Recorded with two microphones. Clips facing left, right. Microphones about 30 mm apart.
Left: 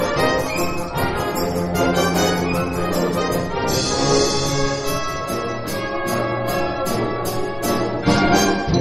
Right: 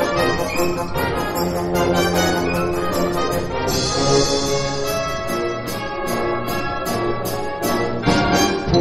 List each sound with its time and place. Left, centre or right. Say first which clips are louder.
1.8 s music: even; right
2.2 s music: right 1 dB; right
4.0 s music: right 1 dB; centre
8.1 s music: left 1 dB; right